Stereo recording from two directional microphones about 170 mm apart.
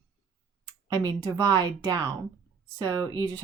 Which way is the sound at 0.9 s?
25° right (ahead or behind).